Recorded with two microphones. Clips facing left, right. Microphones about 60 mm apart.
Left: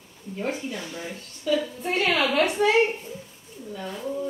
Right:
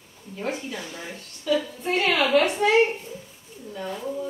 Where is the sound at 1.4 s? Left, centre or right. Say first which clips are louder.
Even; centre.